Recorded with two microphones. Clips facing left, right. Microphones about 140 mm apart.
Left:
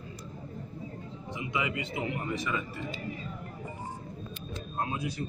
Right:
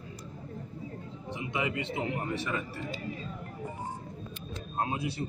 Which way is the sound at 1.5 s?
35° right (ahead or behind).